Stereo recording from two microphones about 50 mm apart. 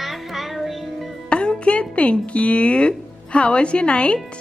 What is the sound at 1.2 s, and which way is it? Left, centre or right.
Music, left.